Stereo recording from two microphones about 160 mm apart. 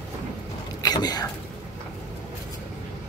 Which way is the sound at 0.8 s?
25° left (ahead or behind).